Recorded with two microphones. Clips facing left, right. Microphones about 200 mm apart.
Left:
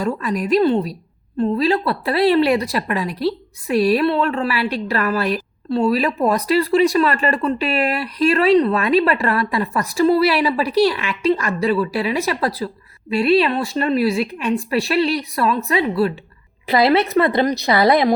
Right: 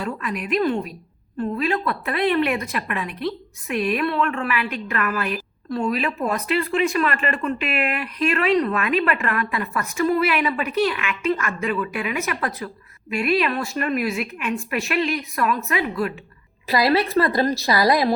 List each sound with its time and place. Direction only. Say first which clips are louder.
0.0 s a woman's voice: left 6 dB; 40° left (ahead or behind)